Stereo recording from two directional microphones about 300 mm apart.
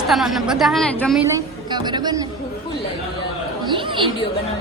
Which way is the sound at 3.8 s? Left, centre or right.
Centre.